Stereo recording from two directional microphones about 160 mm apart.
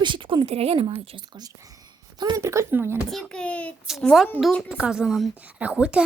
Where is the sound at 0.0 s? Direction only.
30° right (ahead or behind); by 3.0 s 15° right (ahead or behind).